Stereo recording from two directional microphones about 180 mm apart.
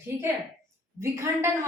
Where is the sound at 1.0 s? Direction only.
15° right (ahead or behind).